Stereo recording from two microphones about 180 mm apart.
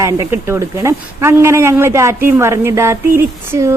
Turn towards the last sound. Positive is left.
turn(degrees=-15)  # may be behind; listen again after turning